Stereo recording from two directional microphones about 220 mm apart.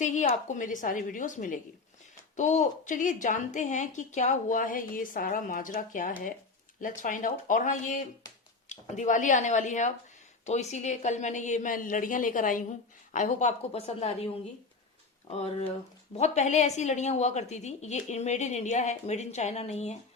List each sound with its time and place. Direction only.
0.0 s a woman's voice: 35° left (ahead or behind)
15.4 s a woman's voice: 25° left (ahead or behind)